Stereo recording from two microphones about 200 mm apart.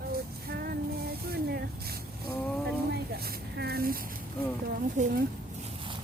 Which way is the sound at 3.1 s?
50° right (ahead or behind).